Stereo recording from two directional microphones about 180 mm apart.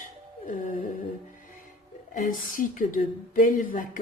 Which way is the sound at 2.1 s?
50° left (ahead or behind).